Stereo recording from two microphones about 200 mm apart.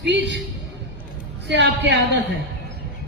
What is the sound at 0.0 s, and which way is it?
Speech, 60° right (ahead or behind).